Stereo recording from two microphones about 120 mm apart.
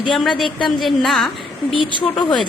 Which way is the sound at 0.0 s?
Centre (ahead or behind).